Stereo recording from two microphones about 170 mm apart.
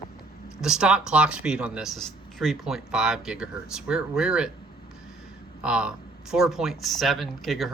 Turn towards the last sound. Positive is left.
turn(degrees=0)  # may be behind; listen again after turning